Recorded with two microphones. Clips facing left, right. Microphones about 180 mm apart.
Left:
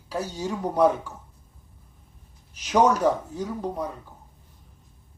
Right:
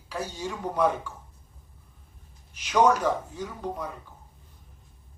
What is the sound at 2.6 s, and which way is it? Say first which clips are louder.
Speech: left 1 dB; 40° left (ahead or behind).